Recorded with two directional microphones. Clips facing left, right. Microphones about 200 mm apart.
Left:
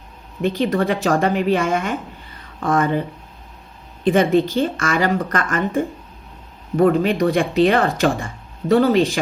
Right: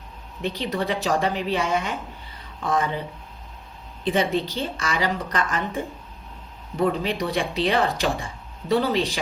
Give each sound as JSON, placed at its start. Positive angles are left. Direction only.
{"t": 0.4, "sound": "speech", "side_deg": 50}
{"t": 4.0, "sound": "speech", "side_deg": 50}